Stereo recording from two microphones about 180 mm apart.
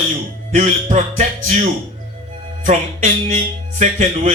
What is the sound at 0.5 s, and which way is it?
A man's voice, 40° right (ahead or behind).